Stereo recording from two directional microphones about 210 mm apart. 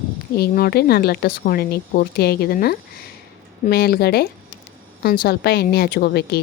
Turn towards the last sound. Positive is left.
turn(degrees=50)  # may be behind; listen again after turning